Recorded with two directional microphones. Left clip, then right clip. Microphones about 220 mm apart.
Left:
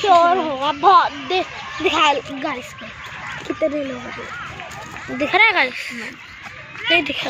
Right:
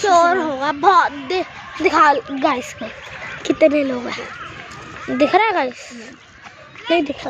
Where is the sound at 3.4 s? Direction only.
55° right (ahead or behind).